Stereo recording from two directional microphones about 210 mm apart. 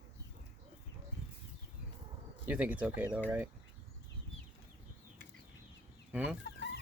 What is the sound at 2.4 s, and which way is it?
Turkey, 5° right (ahead or behind).